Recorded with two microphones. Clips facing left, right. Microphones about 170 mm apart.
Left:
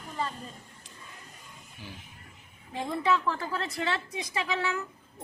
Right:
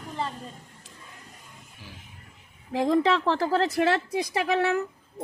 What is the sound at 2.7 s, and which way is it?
Speech, 90° right.